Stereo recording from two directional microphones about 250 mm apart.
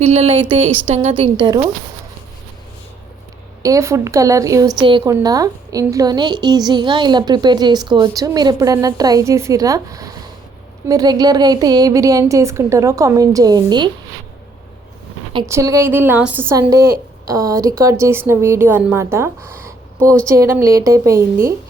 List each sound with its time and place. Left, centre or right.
0.0 s a woman's voice: right
3.6 s a woman's voice: centre
15.3 s a woman's voice: centre
20.0 s speech: centre
20.2 s a woman's voice: centre